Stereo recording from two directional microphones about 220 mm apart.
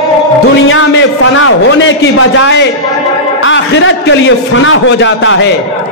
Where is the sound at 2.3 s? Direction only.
55° left (ahead or behind).